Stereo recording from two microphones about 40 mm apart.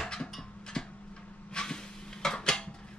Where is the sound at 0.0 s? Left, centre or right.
Centre.